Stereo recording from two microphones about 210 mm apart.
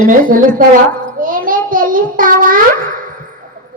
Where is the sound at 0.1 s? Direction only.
40° right (ahead or behind).